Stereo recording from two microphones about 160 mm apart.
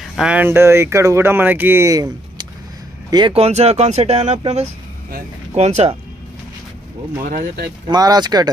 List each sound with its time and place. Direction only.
0.0 s speech: centre (ahead or behind); by 2.0 s 20° right (ahead or behind)
3.1 s speech: 25° right (ahead or behind)
3.3 s speech: 40° right (ahead or behind)
5.6 s speech: 45° right (ahead or behind)
7.2 s speech: 65° right (ahead or behind)
7.9 s speech: 25° right (ahead or behind)